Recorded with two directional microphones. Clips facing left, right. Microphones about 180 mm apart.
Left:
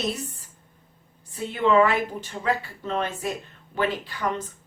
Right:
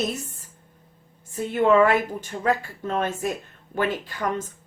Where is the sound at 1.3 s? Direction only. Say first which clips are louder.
Right 2 dB; 50° right (ahead or behind).